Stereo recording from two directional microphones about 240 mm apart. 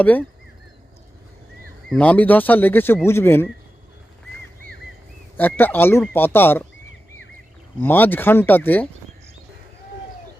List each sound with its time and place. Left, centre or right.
0.0 s speech: centre
1.9 s speech: centre
5.4 s speech: centre
7.8 s speech: centre